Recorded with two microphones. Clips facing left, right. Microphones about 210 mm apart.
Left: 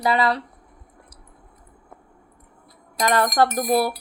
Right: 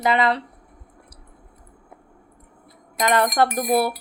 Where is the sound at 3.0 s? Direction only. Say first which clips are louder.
Right 1 dB; 20° right (ahead or behind).